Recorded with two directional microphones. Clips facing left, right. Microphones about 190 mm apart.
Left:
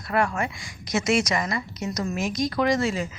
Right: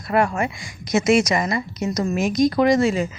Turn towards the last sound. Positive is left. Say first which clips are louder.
# right 6 dB
turn(degrees=-20)  # may be behind; listen again after turning